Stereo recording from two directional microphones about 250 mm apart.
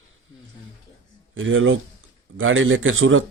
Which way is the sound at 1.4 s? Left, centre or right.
Right.